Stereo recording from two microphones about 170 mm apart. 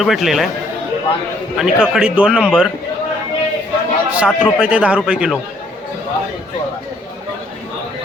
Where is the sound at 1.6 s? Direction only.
5° right (ahead or behind).